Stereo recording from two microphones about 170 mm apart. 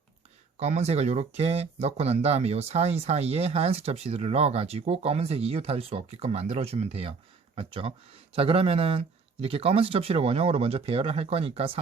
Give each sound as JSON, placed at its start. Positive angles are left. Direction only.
{"t": 0.5, "sound": "speech", "side_deg": -40}